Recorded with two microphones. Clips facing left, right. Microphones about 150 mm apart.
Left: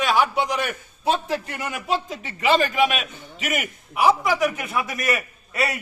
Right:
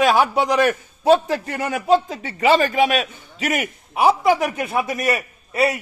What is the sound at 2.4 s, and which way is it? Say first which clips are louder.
A man's voice: right 3 dB; 35° right (ahead or behind).